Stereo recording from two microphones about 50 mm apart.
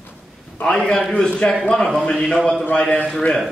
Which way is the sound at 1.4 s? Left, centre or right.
Left.